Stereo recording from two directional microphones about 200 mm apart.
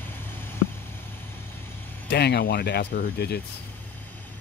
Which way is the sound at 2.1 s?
55° left (ahead or behind).